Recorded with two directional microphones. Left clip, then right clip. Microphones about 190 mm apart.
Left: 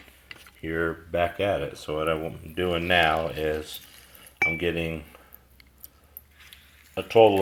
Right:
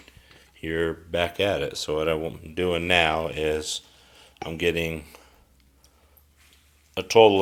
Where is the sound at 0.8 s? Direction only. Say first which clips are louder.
Even; 15° right (ahead or behind).